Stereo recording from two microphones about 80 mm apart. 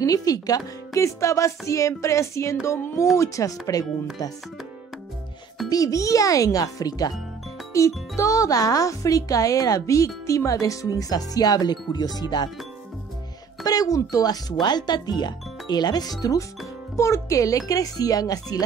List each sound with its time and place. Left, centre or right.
0.0 s speech: left
0.9 s a sound: left
3.2 s speech: left
5.7 s speech: left
7.7 s speech: left
13.7 s speech: left
16.9 s speech: left